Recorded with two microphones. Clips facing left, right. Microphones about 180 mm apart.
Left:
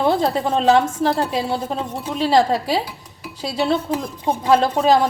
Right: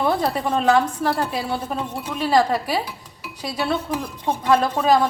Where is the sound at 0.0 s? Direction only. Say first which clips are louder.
Left 3 dB; 25° left (ahead or behind).